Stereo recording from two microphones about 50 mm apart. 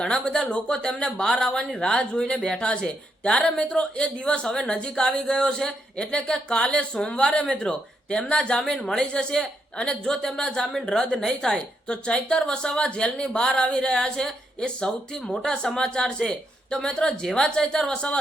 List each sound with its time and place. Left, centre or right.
0.0 s speech: centre